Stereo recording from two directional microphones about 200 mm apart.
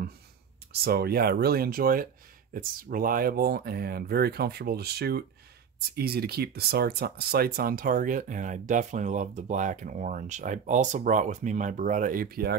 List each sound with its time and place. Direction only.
0.8 s speech: 50° right (ahead or behind)